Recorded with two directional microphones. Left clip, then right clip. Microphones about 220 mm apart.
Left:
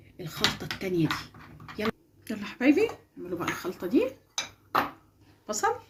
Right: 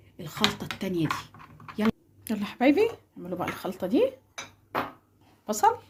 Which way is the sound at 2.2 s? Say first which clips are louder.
Right 1 dB; 50° right (ahead or behind).